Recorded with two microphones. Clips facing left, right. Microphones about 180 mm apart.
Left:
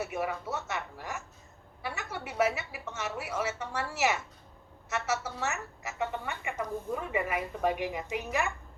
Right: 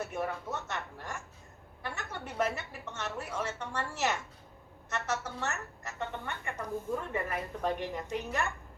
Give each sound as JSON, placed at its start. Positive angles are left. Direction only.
{"t": 0.0, "sound": "a woman's voice", "side_deg": 10}